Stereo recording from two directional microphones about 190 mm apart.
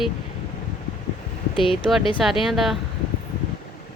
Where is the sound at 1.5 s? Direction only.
25° left (ahead or behind).